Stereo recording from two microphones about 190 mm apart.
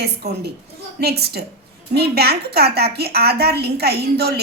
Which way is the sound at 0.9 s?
55° right (ahead or behind).